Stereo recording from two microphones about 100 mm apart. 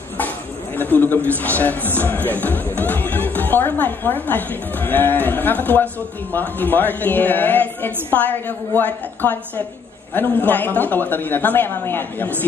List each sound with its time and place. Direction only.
0.7 s a woman's voice: 20° left (ahead or behind)